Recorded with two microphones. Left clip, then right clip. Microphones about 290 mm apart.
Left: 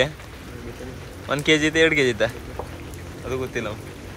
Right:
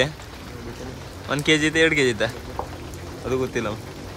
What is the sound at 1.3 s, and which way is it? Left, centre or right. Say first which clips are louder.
Speech: left 1 dB; centre.